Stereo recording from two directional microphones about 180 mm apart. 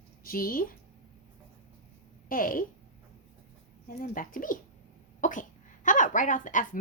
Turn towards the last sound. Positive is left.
turn(degrees=45)  # may be behind; listen again after turning